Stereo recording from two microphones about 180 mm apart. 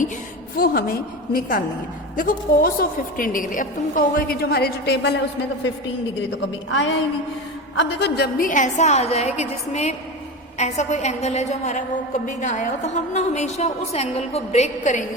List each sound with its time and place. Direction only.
0.5 s a woman's voice: 55° left (ahead or behind); by 5.2 s 70° left (ahead or behind)
6.7 s a woman's voice: 90° left
7.8 s a woman's voice: 80° left; by 15.0 s 40° left (ahead or behind)